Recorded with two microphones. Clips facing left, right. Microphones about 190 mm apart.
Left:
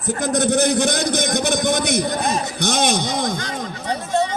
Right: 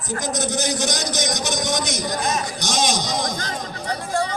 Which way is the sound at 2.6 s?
60° left (ahead or behind).